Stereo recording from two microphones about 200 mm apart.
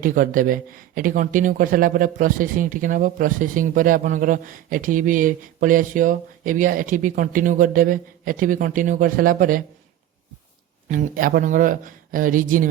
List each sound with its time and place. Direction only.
0.0 s speech: 40° right (ahead or behind)
10.8 s speech: 40° right (ahead or behind)